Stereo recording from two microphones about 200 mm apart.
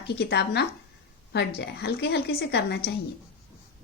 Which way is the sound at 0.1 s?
55° left (ahead or behind).